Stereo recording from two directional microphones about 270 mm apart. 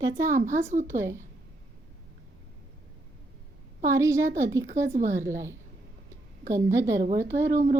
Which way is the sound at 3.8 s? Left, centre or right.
Centre.